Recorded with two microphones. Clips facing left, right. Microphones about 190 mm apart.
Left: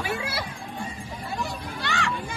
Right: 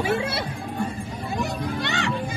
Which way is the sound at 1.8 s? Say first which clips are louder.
Even; 25° right (ahead or behind).